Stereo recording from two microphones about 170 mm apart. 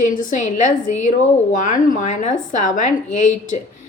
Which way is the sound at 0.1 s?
50° left (ahead or behind).